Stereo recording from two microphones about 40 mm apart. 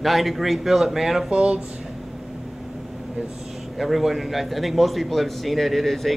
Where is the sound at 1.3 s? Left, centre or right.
Right.